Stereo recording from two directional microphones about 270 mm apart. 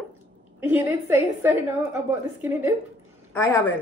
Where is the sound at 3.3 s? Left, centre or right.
Centre.